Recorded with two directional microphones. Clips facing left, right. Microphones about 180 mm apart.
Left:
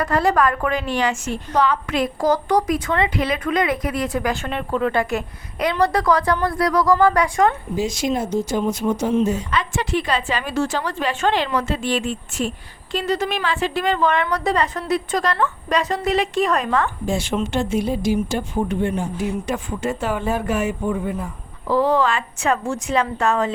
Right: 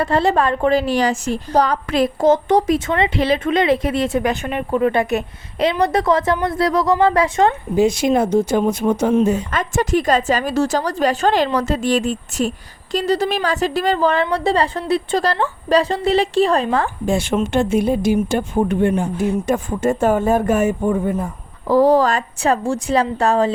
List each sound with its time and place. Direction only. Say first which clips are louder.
0.0 s a woman's voice: right 2 dB; 25° right (ahead or behind)
7.8 s speech: right 9 dB; 60° right (ahead or behind); by 16.9 s 30° right (ahead or behind)
17.1 s speech: right 4 dB; 55° right (ahead or behind); by 23.5 s 35° right (ahead or behind)